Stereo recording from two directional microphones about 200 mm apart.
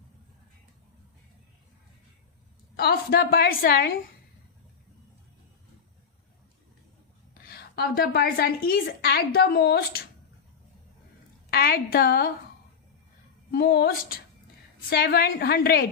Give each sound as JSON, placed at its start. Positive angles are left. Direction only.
{"t": 2.7, "sound": "a woman's voice", "side_deg": 50}
{"t": 7.4, "sound": "a woman's voice", "side_deg": 50}
{"t": 11.5, "sound": "a woman's voice", "side_deg": 50}
{"t": 13.5, "sound": "a woman's voice", "side_deg": 50}